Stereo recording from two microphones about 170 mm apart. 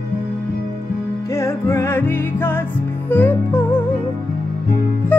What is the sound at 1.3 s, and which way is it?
Music, 15° left (ahead or behind).